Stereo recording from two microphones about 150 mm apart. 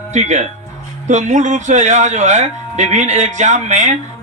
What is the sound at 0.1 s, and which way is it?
A man's voice, 50° right (ahead or behind).